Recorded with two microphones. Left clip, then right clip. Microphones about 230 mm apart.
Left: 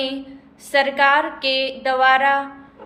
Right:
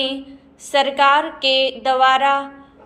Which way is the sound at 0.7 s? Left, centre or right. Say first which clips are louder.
Right 1 dB; centre.